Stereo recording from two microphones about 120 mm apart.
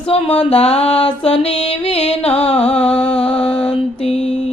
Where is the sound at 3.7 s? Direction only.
55° left (ahead or behind).